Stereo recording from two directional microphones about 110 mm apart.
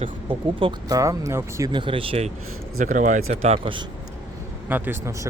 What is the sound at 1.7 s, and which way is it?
Speech, 50° right (ahead or behind).